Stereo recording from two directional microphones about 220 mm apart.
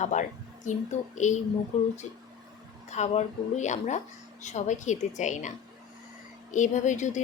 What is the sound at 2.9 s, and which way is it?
A woman's voice, 30° left (ahead or behind).